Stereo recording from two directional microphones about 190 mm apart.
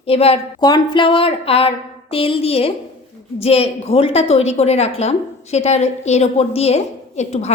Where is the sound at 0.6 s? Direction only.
20° left (ahead or behind).